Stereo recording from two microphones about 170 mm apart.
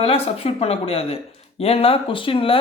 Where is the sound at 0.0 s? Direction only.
35° left (ahead or behind).